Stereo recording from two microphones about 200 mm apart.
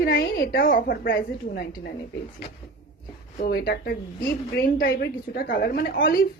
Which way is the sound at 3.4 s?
55° left (ahead or behind).